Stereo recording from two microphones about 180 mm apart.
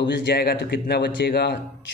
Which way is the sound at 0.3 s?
60° left (ahead or behind).